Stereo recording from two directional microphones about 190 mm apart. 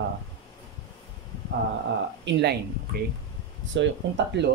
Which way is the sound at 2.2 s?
65° right (ahead or behind).